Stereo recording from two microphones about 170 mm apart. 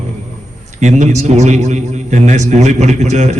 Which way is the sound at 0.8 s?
40° right (ahead or behind).